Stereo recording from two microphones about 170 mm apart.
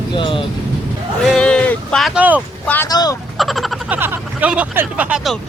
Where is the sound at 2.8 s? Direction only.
20° left (ahead or behind).